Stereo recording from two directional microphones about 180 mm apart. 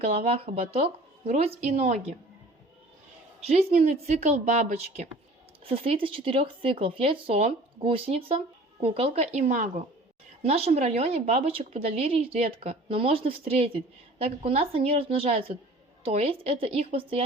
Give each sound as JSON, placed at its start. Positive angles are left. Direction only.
{"t": 0.0, "sound": "speech", "side_deg": -35}
{"t": 3.4, "sound": "a woman's voice", "side_deg": -35}